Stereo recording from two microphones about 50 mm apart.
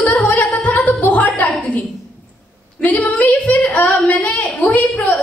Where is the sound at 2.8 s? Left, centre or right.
Left.